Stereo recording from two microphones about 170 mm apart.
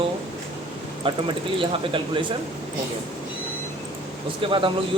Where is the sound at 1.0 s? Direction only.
30° right (ahead or behind).